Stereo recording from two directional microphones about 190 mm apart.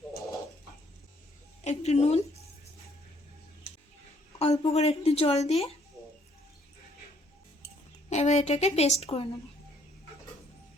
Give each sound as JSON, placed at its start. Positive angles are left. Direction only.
{"t": 1.6, "sound": "a woman's voice", "side_deg": 35}
{"t": 4.4, "sound": "a woman's voice", "side_deg": 35}
{"t": 8.1, "sound": "a woman's voice", "side_deg": 35}